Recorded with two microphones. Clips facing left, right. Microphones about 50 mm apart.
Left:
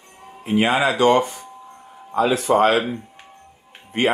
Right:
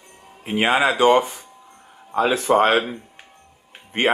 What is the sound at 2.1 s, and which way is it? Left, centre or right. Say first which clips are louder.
Speech: left 1 dB; right.